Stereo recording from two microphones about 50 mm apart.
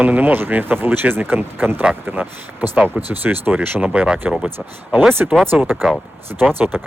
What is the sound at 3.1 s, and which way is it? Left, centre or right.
Speech, right.